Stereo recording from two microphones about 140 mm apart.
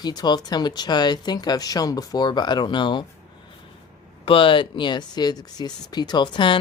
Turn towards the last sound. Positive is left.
turn(degrees=35)  # may be behind; listen again after turning